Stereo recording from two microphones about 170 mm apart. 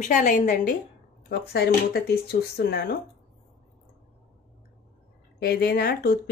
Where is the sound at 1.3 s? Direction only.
70° left (ahead or behind).